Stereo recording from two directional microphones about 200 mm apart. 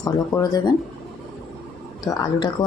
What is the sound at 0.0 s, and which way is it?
Speech, 20° left (ahead or behind).